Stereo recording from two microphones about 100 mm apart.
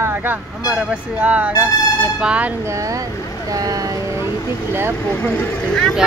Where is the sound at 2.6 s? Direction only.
35° right (ahead or behind).